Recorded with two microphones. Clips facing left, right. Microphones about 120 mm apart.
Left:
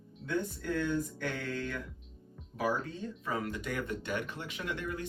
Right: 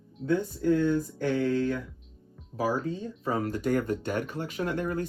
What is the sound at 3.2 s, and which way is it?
Speech, 40° right (ahead or behind).